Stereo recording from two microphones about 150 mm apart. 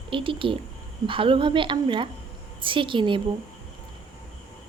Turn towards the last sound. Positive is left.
turn(degrees=-35)  # may be behind; listen again after turning